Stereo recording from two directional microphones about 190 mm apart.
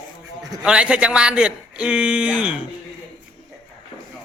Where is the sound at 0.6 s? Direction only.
5° right (ahead or behind).